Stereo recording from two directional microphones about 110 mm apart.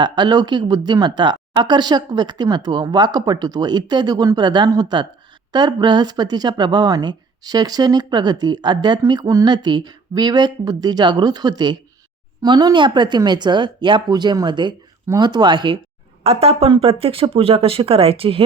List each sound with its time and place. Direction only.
0.0 s a woman's voice: 40° right (ahead or behind)
16.2 s speech: 65° right (ahead or behind)
16.6 s speech: 55° right (ahead or behind)